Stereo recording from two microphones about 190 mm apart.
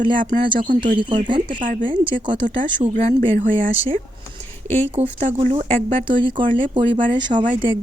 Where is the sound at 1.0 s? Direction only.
25° right (ahead or behind).